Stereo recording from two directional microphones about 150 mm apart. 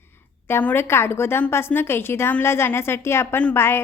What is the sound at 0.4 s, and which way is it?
A woman's voice, 15° left (ahead or behind).